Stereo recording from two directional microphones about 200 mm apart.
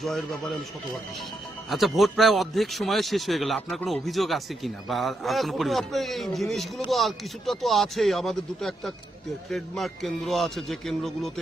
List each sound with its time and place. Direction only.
0.0 s a man's voice: centre (ahead or behind)
1.7 s a man's voice: centre (ahead or behind)